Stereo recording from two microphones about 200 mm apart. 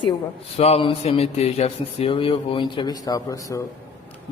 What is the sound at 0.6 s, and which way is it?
Speech, 30° left (ahead or behind).